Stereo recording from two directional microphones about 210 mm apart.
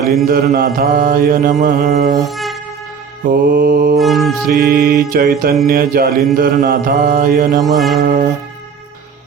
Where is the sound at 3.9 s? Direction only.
Centre (ahead or behind).